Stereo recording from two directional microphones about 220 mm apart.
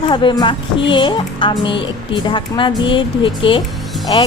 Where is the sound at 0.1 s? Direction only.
20° left (ahead or behind).